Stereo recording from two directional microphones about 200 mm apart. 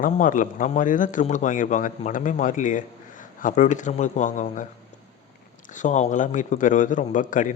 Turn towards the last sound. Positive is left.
turn(degrees=40)  # may be behind; listen again after turning